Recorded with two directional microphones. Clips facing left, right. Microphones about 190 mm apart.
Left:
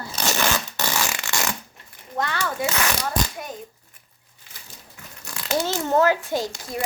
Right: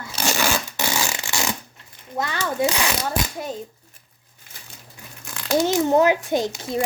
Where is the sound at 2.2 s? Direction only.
15° right (ahead or behind).